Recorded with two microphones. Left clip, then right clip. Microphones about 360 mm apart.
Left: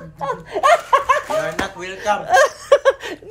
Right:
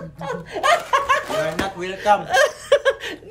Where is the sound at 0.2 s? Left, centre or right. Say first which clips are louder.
Left 5 dB; centre.